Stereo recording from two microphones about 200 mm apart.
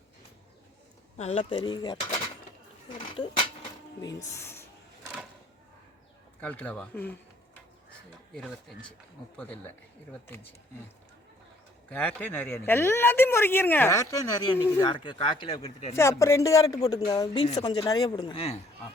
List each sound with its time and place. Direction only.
1.2 s speech: 30° left (ahead or behind)
4.4 s music: 10° left (ahead or behind)
6.4 s speech: 5° left (ahead or behind)
8.3 s speech: centre (ahead or behind)
11.9 s speech: 10° left (ahead or behind); by 16.0 s 30° left (ahead or behind)
16.0 s speech: 15° left (ahead or behind)